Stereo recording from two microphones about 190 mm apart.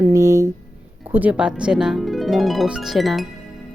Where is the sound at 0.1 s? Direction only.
15° right (ahead or behind).